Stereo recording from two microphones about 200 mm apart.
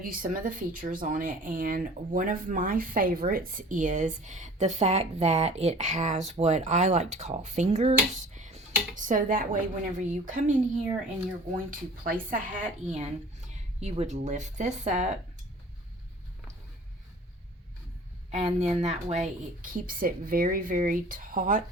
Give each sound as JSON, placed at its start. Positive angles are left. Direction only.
{"t": 0.0, "sound": "speech", "side_deg": -45}
{"t": 18.3, "sound": "speech", "side_deg": -30}